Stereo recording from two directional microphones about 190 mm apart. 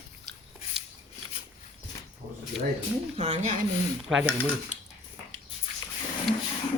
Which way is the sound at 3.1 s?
35° right (ahead or behind).